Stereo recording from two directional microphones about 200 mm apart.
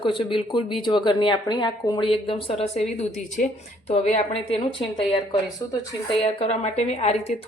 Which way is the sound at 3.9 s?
30° left (ahead or behind).